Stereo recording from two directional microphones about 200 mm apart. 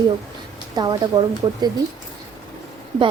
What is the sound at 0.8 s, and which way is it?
Speech, 20° right (ahead or behind).